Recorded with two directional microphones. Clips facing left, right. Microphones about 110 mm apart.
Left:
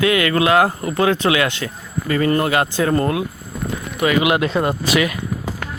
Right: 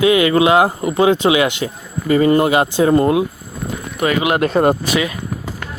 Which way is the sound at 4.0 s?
35° right (ahead or behind).